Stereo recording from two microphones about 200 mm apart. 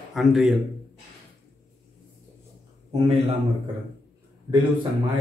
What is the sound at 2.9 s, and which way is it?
Speech, 30° right (ahead or behind).